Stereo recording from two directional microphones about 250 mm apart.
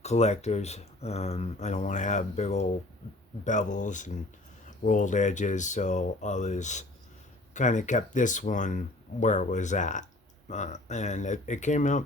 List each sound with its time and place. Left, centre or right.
0.0 s speech: left